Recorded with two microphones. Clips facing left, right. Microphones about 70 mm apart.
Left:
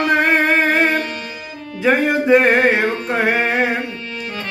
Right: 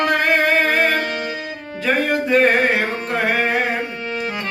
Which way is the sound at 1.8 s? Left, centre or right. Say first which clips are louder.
Left 4 dB; centre.